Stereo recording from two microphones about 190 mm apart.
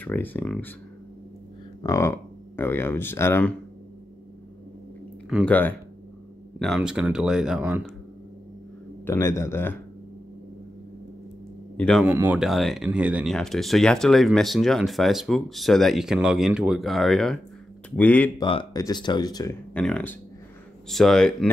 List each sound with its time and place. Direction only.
0.0 s a man's voice: 10° left (ahead or behind)
1.8 s speech: 15° left (ahead or behind)
5.3 s a man's voice: 5° left (ahead or behind)
6.6 s speech: centre (ahead or behind)
9.0 s a man's voice: 15° left (ahead or behind)
11.7 s speech: 5° left (ahead or behind)
12.0 s a man's voice: 10° right (ahead or behind); by 18.3 s 5° left (ahead or behind)
18.4 s speech: 25° left (ahead or behind)
19.7 s a man's voice: 5° left (ahead or behind)